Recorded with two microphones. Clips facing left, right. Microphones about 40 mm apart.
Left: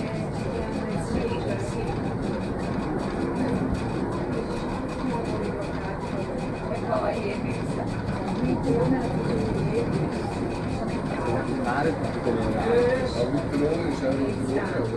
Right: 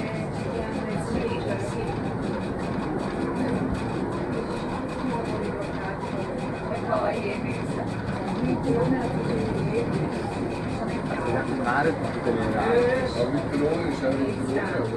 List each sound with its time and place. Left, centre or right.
6.9 s vehicle: centre
8.7 s vehicle: centre
11.2 s vehicle: right
12.5 s a sound: centre